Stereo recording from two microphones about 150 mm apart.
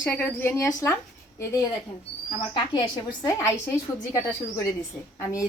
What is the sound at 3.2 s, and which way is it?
A woman's voice, 20° left (ahead or behind).